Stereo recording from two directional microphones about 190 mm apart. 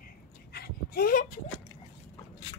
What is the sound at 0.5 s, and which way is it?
Dog, 55° left (ahead or behind).